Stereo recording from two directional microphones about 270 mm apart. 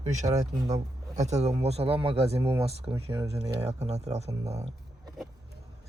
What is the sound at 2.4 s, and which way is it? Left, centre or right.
Speech, centre.